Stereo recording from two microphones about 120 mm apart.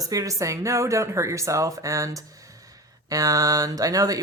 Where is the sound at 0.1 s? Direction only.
30° right (ahead or behind).